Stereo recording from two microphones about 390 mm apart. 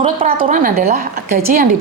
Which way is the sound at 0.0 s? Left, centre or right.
Right.